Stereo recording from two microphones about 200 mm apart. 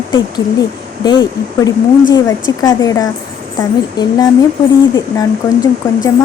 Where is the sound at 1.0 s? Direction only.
20° left (ahead or behind).